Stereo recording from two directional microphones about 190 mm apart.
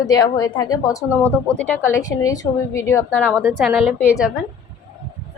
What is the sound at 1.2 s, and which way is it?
Speech, 5° left (ahead or behind).